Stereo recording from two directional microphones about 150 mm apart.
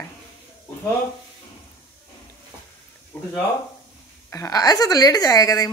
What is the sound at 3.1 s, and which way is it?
Speech, 15° left (ahead or behind).